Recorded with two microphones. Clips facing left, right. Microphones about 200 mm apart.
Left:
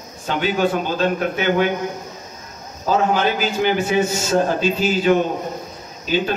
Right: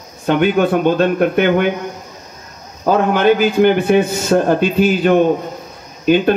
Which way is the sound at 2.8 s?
55° right (ahead or behind).